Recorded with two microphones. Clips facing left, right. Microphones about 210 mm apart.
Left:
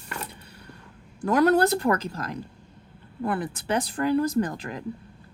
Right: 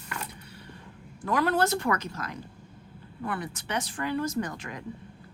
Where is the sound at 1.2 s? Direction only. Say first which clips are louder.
Left 6 dB; 45° left (ahead or behind).